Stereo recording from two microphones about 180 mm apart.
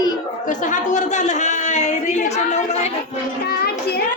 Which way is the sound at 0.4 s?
45° left (ahead or behind).